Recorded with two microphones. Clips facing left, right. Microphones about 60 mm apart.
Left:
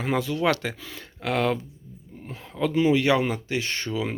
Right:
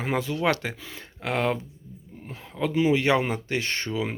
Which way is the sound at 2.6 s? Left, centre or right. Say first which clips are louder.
Left 1 dB; right.